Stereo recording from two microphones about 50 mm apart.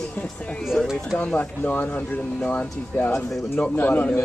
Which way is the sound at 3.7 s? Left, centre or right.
Left.